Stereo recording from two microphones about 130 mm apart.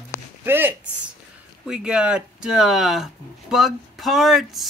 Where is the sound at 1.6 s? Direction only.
5° right (ahead or behind).